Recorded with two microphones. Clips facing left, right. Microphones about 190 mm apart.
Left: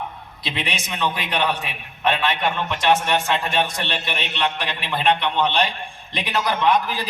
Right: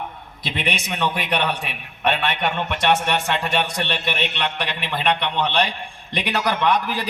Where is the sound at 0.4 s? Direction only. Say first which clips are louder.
Right 2 dB; 55° right (ahead or behind).